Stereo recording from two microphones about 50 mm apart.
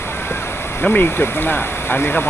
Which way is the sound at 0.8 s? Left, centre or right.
Left.